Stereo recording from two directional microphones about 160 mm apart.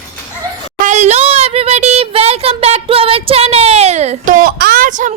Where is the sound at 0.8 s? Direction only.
45° right (ahead or behind).